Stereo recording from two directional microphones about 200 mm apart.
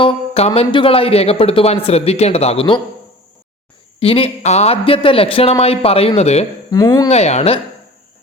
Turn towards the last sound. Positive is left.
turn(degrees=30)  # may be behind; listen again after turning